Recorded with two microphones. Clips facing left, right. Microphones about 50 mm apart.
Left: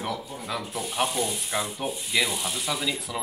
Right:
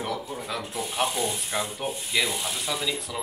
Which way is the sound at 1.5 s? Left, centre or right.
Centre.